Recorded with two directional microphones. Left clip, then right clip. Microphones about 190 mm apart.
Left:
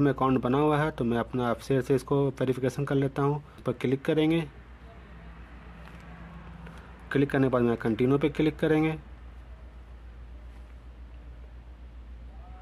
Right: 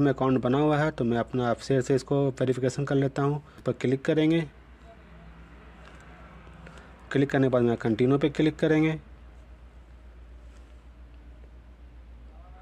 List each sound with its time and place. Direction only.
0.0 s speech: 20° right (ahead or behind)
7.1 s speech: 25° right (ahead or behind)